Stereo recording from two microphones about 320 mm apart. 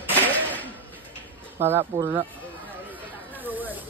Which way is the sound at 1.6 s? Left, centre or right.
Centre.